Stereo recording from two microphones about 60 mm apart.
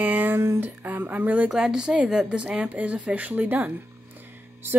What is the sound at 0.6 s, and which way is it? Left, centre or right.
Speech, right.